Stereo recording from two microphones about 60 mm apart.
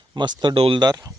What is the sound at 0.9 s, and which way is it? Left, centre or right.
Speech, right.